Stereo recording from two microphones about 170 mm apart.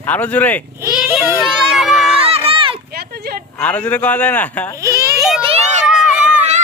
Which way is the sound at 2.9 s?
65° right (ahead or behind).